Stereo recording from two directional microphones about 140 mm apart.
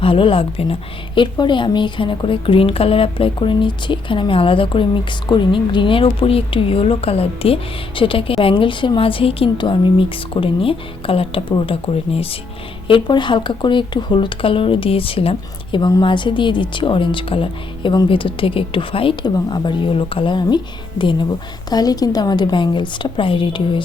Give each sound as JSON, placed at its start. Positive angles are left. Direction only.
{"t": 0.0, "sound": "a woman's voice", "side_deg": 40}